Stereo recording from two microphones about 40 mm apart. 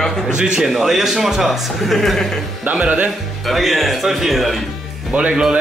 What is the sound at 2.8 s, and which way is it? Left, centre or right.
Speech, right.